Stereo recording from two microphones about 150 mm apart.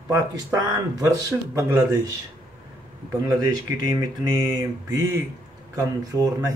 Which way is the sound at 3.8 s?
25° right (ahead or behind).